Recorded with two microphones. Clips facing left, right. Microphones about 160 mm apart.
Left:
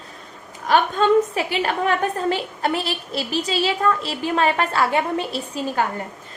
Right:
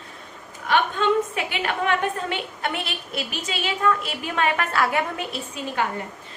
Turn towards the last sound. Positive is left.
turn(degrees=35)  # may be behind; listen again after turning